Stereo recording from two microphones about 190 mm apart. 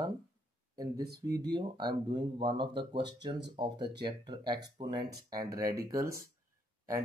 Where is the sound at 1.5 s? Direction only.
20° right (ahead or behind).